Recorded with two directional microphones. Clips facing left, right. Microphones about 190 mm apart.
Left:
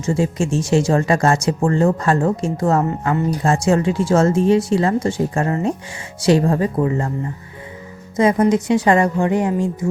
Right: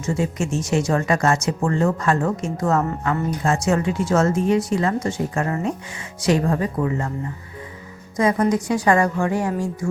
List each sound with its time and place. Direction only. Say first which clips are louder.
0.0 s speech: left 4 dB; 30° left (ahead or behind)
8.1 s speech: left 4 dB; 25° left (ahead or behind)